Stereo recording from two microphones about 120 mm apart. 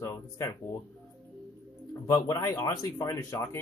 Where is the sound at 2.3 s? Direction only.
25° left (ahead or behind).